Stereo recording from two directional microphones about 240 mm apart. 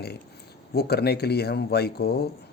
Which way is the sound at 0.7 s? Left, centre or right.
Left.